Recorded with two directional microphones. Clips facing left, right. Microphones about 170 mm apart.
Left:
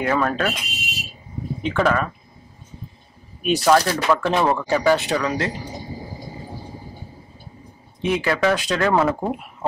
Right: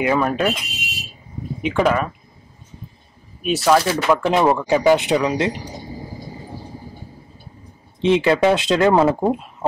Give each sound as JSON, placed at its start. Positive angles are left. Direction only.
{"t": 0.0, "sound": "speech", "side_deg": -15}
{"t": 1.6, "sound": "speech", "side_deg": -10}
{"t": 3.4, "sound": "speech", "side_deg": -5}
{"t": 8.0, "sound": "speech", "side_deg": -25}